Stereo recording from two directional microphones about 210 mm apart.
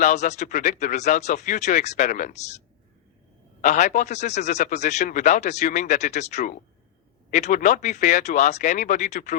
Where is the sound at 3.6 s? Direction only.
35° left (ahead or behind).